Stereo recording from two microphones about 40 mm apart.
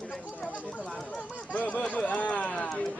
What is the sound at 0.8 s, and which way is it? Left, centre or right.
Chatter, left.